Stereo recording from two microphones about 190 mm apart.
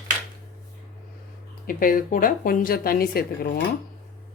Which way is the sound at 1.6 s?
45° left (ahead or behind).